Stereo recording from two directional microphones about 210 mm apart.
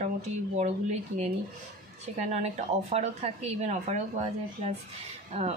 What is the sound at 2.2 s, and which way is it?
A woman's voice, 30° right (ahead or behind).